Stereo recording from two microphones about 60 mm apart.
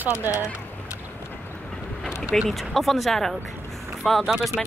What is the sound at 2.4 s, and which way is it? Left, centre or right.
Speech, centre.